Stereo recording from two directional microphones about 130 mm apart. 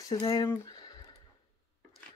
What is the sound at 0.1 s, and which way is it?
Speech, 30° left (ahead or behind).